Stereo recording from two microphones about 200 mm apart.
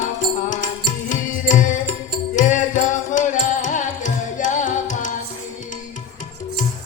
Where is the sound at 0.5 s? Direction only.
40° left (ahead or behind).